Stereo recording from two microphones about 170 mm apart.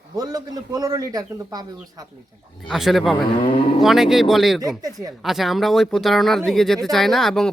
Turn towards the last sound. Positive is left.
turn(degrees=0)  # may be behind; listen again after turning